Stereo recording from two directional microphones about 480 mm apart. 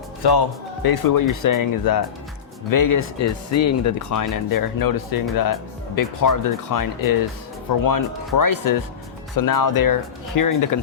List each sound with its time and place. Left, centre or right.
0.2 s speech: left